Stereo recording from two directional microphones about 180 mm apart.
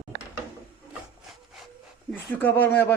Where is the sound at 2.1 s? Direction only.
10° left (ahead or behind).